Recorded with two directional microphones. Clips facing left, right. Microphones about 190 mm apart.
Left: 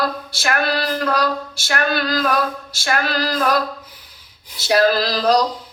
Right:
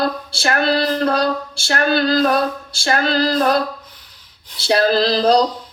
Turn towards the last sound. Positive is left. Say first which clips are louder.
# right 3 dB
turn(degrees=-30)  # may be behind; listen again after turning